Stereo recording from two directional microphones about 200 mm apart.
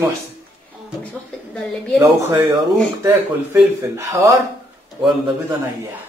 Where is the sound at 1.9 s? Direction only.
15° right (ahead or behind).